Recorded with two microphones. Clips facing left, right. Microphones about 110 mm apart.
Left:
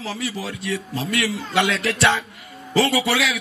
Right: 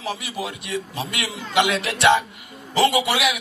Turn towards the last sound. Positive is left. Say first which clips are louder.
# even
turn(degrees=-15)  # may be behind; listen again after turning